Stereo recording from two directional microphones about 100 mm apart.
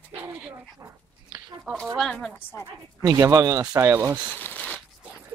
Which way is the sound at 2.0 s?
5° left (ahead or behind).